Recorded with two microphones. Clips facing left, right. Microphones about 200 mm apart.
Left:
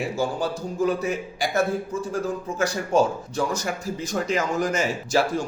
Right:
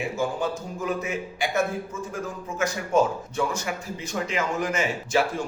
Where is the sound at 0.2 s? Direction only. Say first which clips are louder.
Left 1 dB; 35° left (ahead or behind).